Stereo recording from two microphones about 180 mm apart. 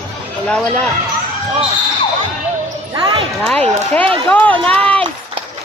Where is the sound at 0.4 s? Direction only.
5° left (ahead or behind).